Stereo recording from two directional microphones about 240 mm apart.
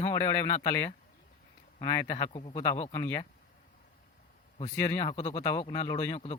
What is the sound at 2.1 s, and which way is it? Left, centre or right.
Speech, left.